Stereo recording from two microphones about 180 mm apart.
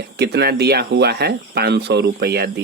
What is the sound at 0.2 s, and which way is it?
Speech, 65° right (ahead or behind).